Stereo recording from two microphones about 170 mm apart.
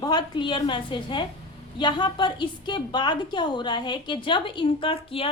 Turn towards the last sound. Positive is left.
turn(degrees=30)  # may be behind; listen again after turning